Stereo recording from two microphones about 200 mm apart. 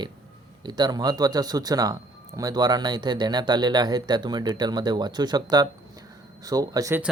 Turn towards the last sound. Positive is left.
turn(degrees=-15)  # may be behind; listen again after turning